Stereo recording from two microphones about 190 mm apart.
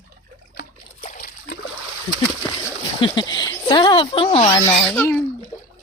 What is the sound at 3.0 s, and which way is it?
Speech, 25° left (ahead or behind).